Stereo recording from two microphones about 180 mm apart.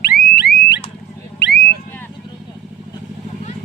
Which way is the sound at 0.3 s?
65° left (ahead or behind).